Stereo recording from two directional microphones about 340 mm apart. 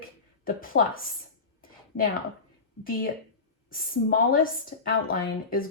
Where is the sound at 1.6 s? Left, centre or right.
Left.